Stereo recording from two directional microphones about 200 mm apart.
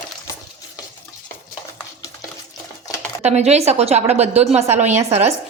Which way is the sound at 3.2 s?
35° right (ahead or behind).